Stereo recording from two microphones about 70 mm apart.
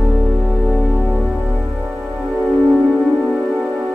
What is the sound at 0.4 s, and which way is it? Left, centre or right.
Music, centre.